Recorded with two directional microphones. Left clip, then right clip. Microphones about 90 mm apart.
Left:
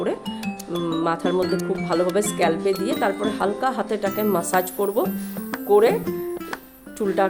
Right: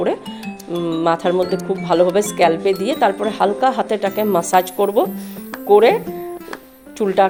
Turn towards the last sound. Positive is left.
turn(degrees=-30)  # may be behind; listen again after turning